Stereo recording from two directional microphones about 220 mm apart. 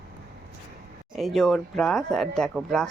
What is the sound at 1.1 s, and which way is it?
Speech, centre (ahead or behind).